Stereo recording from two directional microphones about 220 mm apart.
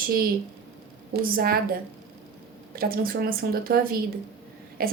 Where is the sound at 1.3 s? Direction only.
45° right (ahead or behind).